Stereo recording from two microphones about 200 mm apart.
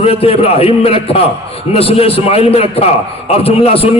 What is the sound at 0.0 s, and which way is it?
A man's voice, 30° left (ahead or behind).